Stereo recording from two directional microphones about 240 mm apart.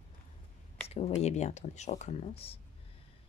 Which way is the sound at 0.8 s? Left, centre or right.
Left.